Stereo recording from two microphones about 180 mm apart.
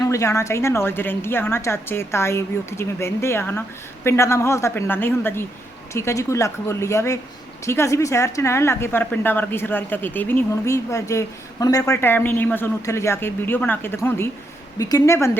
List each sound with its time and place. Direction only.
0.0 s a woman's voice: 20° left (ahead or behind)